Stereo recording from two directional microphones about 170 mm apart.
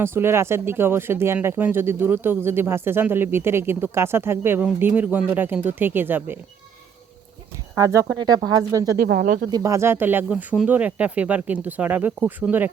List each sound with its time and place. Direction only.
0.0 s speech: 15° right (ahead or behind)
7.8 s speech: 20° right (ahead or behind)
9.0 s speech: 65° right (ahead or behind)
9.5 s speech: 20° right (ahead or behind)